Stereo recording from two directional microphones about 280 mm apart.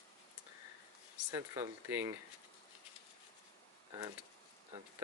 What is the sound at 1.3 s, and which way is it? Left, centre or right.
Speech, centre.